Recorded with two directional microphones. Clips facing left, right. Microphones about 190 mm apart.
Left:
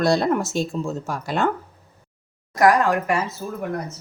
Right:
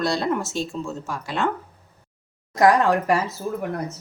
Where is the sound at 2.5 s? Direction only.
25° right (ahead or behind).